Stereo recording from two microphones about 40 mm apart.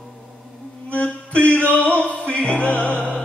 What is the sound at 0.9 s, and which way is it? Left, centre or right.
Music, left.